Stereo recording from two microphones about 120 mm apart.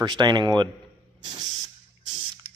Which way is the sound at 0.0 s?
35° right (ahead or behind).